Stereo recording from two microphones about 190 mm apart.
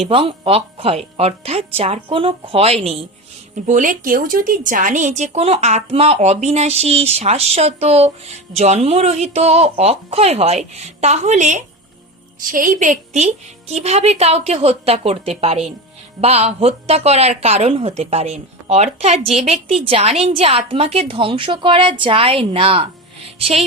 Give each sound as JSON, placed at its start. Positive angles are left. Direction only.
{"t": 0.0, "sound": "a woman's voice", "side_deg": -30}
{"t": 3.5, "sound": "a woman's voice", "side_deg": -45}